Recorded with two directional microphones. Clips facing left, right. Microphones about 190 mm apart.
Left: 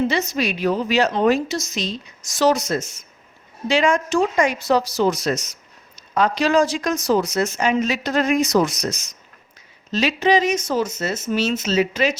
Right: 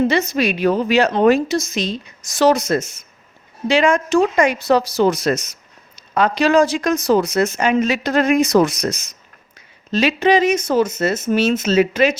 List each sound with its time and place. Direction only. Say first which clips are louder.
0.1 s a woman's voice: right 4 dB; 55° right (ahead or behind)